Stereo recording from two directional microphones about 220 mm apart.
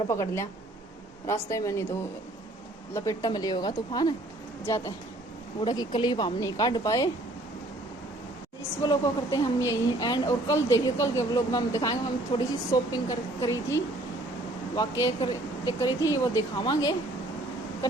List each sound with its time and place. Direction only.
0.1 s speech: 15° left (ahead or behind)
2.9 s speech: 15° left (ahead or behind)
8.8 s speech: 15° left (ahead or behind)
15.0 s speech: 15° left (ahead or behind)